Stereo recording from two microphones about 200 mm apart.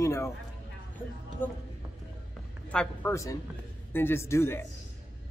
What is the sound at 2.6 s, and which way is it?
Speech, 10° left (ahead or behind).